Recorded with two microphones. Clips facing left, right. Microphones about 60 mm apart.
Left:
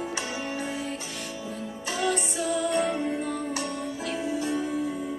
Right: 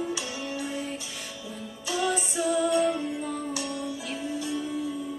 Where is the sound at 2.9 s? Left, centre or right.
Left.